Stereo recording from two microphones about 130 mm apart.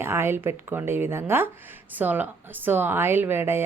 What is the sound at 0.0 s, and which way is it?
Speech, 20° right (ahead or behind).